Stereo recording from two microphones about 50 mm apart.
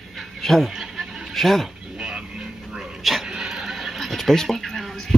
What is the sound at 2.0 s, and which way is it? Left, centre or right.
Vehicle, centre.